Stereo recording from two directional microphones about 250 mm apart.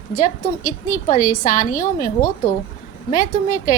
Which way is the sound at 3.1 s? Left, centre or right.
Left.